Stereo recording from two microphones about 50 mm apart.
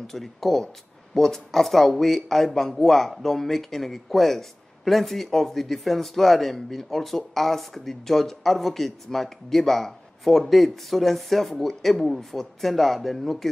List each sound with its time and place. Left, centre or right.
0.0 s speech: centre